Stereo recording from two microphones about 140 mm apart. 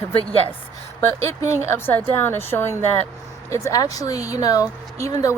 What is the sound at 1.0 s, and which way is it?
A woman's voice, 20° left (ahead or behind).